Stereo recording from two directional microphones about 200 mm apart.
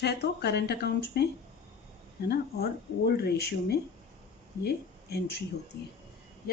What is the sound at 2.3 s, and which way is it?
A woman's voice, 50° left (ahead or behind).